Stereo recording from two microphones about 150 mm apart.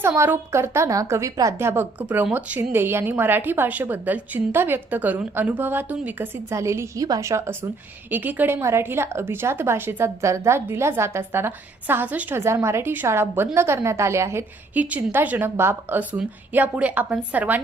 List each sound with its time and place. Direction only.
0.0 s a woman's voice: 15° right (ahead or behind)